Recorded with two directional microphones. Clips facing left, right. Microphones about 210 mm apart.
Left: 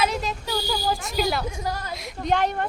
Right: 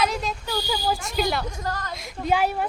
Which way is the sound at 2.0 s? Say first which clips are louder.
Right 1 dB; centre (ahead or behind).